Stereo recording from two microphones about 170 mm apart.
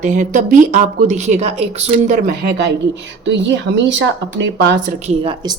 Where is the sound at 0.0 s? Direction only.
50° right (ahead or behind).